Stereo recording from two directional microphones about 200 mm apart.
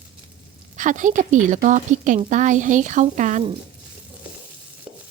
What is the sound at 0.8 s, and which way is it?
A woman's voice, 40° right (ahead or behind).